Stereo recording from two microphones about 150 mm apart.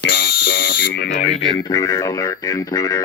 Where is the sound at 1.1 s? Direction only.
50° left (ahead or behind).